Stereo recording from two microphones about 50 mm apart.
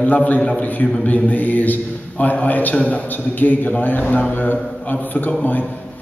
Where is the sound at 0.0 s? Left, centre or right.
Left.